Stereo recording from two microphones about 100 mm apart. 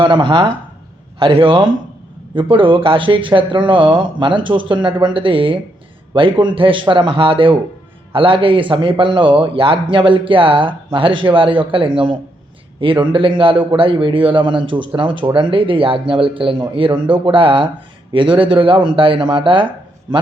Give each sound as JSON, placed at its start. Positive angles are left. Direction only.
{"t": 0.0, "sound": "a man's voice", "side_deg": -55}